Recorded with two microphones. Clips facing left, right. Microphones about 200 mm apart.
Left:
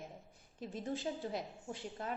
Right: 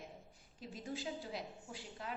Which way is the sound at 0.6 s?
50° left (ahead or behind).